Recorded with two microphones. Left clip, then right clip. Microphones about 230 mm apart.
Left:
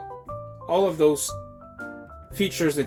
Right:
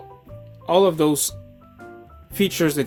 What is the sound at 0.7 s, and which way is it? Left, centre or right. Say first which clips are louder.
Speech: right 3 dB; right.